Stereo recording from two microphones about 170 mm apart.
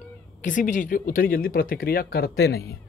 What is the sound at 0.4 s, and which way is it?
Speech, 50° left (ahead or behind).